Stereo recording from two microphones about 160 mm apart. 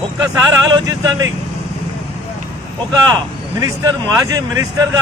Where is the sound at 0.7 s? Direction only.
25° right (ahead or behind).